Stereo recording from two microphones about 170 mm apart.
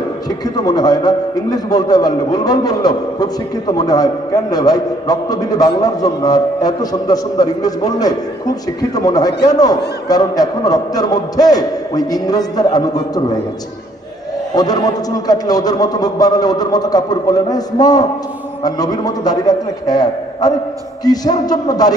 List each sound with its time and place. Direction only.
0.7 s a man's voice: 20° left (ahead or behind)
14.5 s a man's voice: 20° left (ahead or behind)